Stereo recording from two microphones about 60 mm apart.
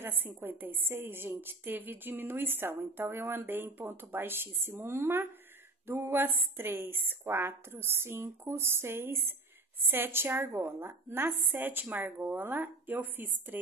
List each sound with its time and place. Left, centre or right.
0.0 s a woman's voice: right